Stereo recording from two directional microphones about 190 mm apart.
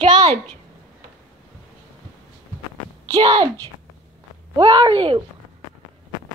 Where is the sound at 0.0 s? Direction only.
25° right (ahead or behind).